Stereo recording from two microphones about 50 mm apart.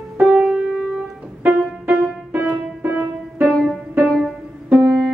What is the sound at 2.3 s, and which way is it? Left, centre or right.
Music, right.